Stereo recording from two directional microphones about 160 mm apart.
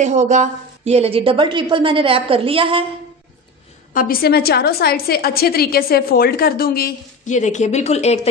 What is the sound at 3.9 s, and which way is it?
A woman's voice, 70° left (ahead or behind).